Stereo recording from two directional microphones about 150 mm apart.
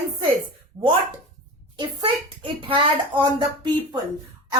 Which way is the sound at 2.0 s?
35° right (ahead or behind).